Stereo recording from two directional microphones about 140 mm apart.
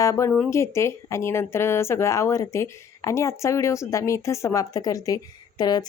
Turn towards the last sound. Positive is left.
turn(degrees=30)  # may be behind; listen again after turning